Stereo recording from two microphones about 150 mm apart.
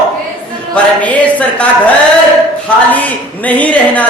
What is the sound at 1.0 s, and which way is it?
A woman's voice, 10° left (ahead or behind).